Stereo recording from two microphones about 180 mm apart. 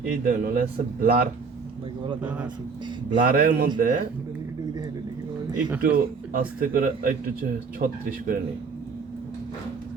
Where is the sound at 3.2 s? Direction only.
55° right (ahead or behind).